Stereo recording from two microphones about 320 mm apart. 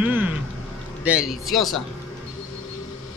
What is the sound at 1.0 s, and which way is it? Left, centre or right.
Speech, centre.